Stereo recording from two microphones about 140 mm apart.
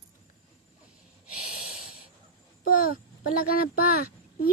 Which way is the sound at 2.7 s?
90° left.